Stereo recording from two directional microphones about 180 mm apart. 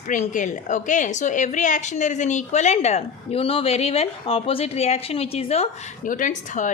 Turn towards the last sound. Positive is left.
turn(degrees=45)  # may be behind; listen again after turning